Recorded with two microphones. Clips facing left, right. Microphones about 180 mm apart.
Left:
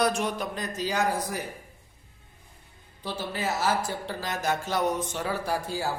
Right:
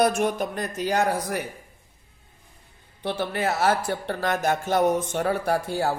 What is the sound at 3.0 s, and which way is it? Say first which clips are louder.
Speech: right 5 dB; 65° right (ahead or behind).